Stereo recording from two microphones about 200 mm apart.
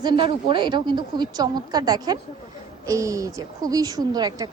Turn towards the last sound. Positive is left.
turn(degrees=-20)  # may be behind; listen again after turning